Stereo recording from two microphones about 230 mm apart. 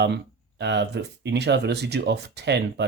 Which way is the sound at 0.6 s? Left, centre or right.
Right.